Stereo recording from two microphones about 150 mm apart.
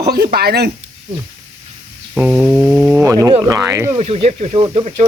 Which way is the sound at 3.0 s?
25° right (ahead or behind).